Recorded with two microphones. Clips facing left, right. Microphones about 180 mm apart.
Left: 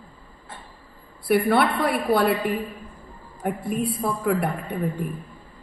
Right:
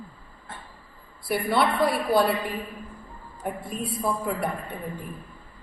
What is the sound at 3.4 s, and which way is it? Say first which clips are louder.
Speech: left 4 dB; 60° left (ahead or behind).